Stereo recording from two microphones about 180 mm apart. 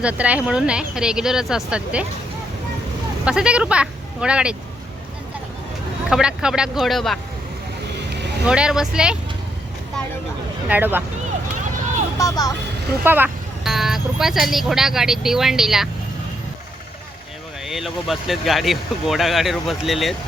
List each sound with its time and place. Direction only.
0.0 s speech: 5° right (ahead or behind)
3.2 s speech: 5° right (ahead or behind)
6.1 s speech: 5° right (ahead or behind)
8.4 s speech: 5° right (ahead or behind)
10.7 s speech: 10° right (ahead or behind)
12.1 s speech: 20° left (ahead or behind)
13.1 s speech: 10° right (ahead or behind)
17.7 s speech: centre (ahead or behind)